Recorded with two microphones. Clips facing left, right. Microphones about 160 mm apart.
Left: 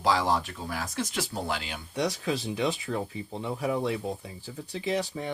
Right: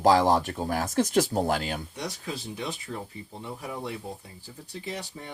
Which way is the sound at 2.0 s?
90° left.